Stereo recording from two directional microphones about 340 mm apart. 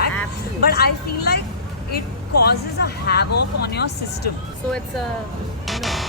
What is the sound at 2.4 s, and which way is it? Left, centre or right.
Speech, left.